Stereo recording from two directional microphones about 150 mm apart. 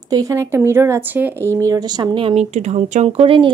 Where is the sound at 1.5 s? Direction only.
25° right (ahead or behind).